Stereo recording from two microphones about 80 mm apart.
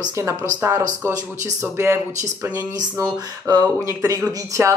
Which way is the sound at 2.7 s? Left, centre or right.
Right.